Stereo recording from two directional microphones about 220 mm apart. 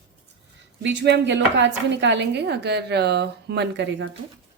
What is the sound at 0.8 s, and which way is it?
A woman's voice, 55° right (ahead or behind).